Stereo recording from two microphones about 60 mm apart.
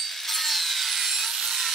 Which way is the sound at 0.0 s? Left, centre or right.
Centre.